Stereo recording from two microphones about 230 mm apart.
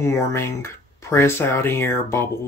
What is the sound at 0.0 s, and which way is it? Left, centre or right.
Speech, centre.